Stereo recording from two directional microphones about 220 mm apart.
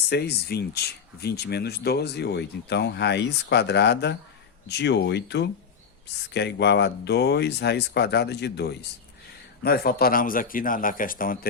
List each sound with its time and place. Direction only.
0.1 s a man's voice: 45° left (ahead or behind)